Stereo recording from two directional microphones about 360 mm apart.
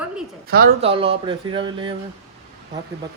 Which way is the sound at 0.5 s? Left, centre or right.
Centre.